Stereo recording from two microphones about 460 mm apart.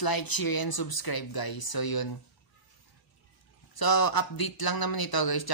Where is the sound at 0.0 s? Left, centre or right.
Left.